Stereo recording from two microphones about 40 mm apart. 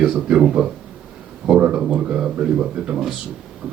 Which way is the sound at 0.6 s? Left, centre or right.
Right.